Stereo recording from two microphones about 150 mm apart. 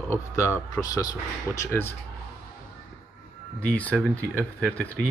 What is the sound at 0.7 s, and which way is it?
Speech, 25° left (ahead or behind).